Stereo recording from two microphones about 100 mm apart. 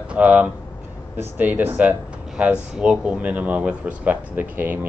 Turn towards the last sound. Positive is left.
turn(degrees=-20)  # may be behind; listen again after turning